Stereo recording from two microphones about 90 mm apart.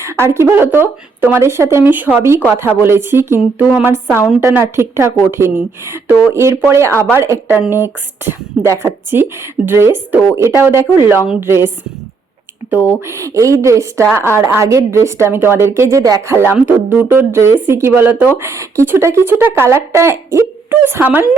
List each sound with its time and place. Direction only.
0.0 s a woman's voice: 30° right (ahead or behind)
13.1 s a woman's voice: 30° right (ahead or behind)
20.7 s speech: 20° right (ahead or behind)